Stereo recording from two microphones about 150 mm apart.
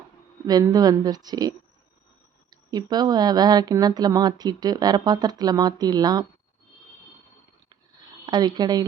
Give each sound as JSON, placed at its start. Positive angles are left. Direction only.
{"t": 0.4, "sound": "speech", "side_deg": -25}
{"t": 8.3, "sound": "speech", "side_deg": -30}